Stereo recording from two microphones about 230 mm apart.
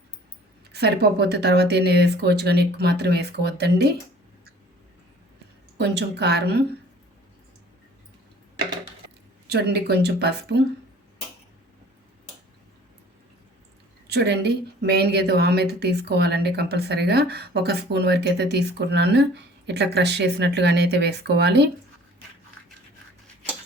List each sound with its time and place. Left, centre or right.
0.7 s a woman's voice: right
5.7 s a woman's voice: right
9.5 s a woman's voice: right
14.1 s a woman's voice: right